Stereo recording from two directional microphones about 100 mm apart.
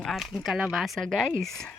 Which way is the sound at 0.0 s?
Centre (ahead or behind).